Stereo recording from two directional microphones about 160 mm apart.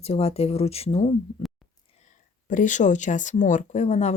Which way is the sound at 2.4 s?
55° left (ahead or behind).